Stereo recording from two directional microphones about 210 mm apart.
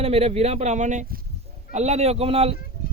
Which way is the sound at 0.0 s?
30° right (ahead or behind).